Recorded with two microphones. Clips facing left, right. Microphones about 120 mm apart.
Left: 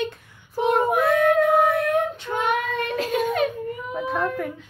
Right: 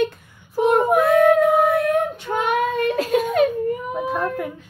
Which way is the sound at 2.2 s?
40° right (ahead or behind).